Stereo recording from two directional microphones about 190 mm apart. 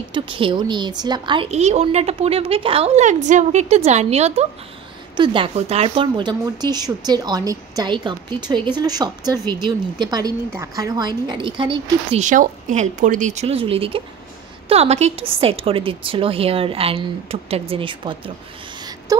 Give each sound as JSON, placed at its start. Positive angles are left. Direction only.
{"t": 0.1, "sound": "a woman's voice", "side_deg": -25}
{"t": 12.2, "sound": "a woman's voice", "side_deg": -45}